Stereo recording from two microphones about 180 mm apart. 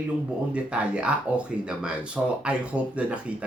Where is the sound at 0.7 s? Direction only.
5° right (ahead or behind).